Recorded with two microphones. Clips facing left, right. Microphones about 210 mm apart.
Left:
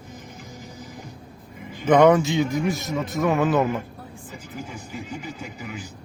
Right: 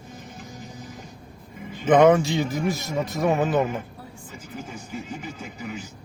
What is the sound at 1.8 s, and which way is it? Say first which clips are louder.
A man's voice: even; centre (ahead or behind).